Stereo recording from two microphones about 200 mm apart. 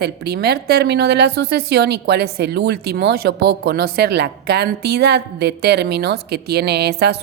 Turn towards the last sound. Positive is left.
turn(degrees=-55)  # may be behind; listen again after turning